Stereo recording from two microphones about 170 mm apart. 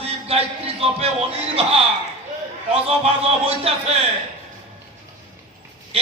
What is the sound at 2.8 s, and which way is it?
A man's voice, 35° right (ahead or behind).